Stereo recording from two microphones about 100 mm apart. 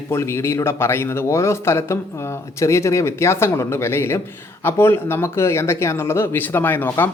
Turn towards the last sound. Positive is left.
turn(degrees=20)  # may be behind; listen again after turning